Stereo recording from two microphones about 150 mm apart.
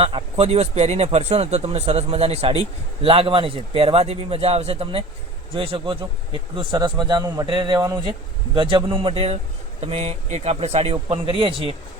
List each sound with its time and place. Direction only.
0.0 s speech: 40° right (ahead or behind)